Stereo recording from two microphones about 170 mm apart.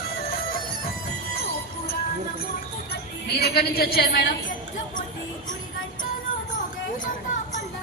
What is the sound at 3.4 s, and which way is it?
Speech, 65° left (ahead or behind).